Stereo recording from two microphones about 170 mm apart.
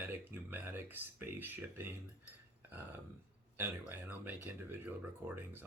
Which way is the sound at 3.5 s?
10° right (ahead or behind).